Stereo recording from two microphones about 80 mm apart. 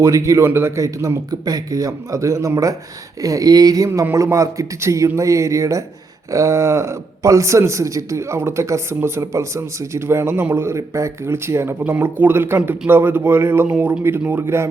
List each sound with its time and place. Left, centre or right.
0.0 s speech: right
4.1 s speech: right